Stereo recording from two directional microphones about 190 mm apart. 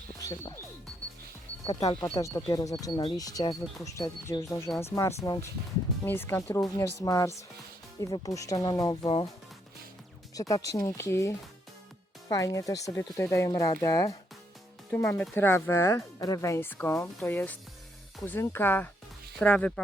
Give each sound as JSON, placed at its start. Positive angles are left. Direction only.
{"t": 0.2, "sound": "music", "side_deg": 20}
{"t": 1.6, "sound": "speech", "side_deg": 20}
{"t": 10.5, "sound": "speech", "side_deg": 15}